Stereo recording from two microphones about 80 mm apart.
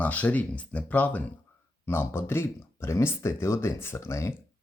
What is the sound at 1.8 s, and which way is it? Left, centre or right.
Speech, left.